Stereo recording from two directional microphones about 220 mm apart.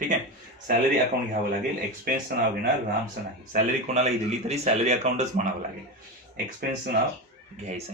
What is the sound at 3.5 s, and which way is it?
Speech, 30° right (ahead or behind).